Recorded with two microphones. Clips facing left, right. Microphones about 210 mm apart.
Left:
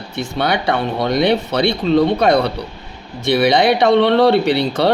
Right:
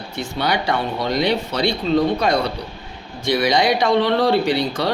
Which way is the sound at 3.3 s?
60° left (ahead or behind).